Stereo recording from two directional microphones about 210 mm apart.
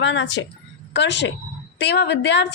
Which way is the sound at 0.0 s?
60° left (ahead or behind).